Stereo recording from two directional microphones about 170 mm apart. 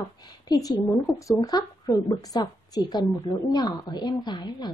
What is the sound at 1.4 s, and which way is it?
A woman's voice, 20° left (ahead or behind).